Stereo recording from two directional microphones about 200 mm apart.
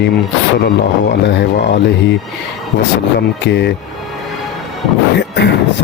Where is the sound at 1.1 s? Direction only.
60° left (ahead or behind).